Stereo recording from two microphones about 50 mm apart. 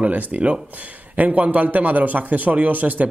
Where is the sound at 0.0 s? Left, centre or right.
Right.